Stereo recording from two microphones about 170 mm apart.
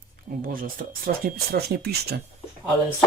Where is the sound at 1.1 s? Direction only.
65° right (ahead or behind).